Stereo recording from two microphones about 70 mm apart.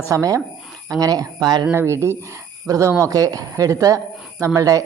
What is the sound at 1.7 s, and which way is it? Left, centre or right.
Speech, right.